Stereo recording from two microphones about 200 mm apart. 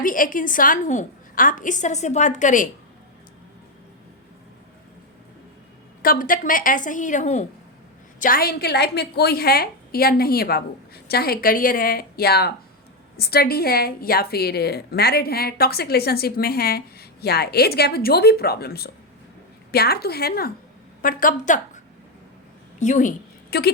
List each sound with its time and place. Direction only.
0.0 s a woman's voice: 45° left (ahead or behind)
6.0 s a woman's voice: 45° left (ahead or behind)
22.8 s a woman's voice: 40° left (ahead or behind)